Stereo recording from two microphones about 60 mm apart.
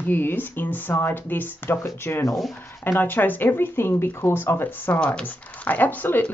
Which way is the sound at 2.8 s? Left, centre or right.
Left.